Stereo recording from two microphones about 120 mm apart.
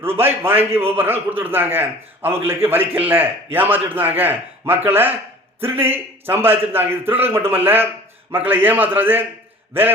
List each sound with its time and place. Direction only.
0.0 s a man's voice: 20° right (ahead or behind)